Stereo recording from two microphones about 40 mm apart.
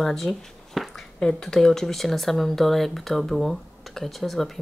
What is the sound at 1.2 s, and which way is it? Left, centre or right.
Speech, centre.